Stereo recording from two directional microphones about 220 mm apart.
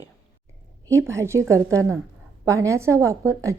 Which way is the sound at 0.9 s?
15° right (ahead or behind).